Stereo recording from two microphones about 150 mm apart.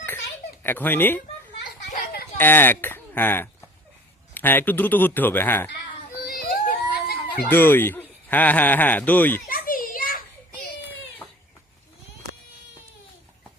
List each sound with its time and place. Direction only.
0.6 s speech: 15° left (ahead or behind)
2.4 s speech: 15° left (ahead or behind)
6.2 s a sound: 80° left
7.4 s speech: 15° left (ahead or behind)
9.5 s children playing: 70° left (ahead or behind)